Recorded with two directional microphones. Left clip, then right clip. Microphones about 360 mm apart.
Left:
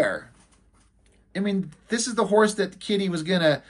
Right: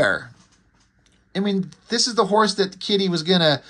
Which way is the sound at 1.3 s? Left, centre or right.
Centre.